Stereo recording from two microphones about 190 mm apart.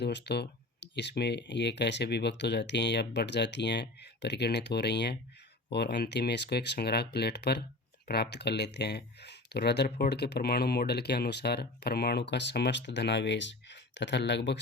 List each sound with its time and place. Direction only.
0.0 s speech: 65° left (ahead or behind)